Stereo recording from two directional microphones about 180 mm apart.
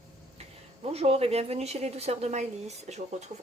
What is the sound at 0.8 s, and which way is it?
Speech, 35° right (ahead or behind).